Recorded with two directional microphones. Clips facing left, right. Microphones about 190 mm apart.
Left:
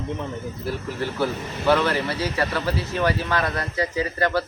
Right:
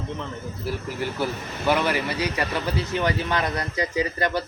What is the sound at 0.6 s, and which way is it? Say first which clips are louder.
Speech: even; 10° right (ahead or behind).